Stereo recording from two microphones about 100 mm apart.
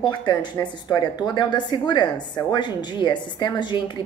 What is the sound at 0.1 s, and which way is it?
A woman's voice, 50° left (ahead or behind).